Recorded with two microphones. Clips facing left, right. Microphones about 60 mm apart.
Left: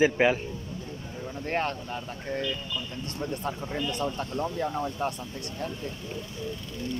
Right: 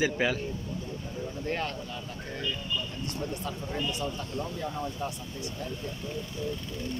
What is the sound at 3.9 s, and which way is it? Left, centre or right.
Speech, left.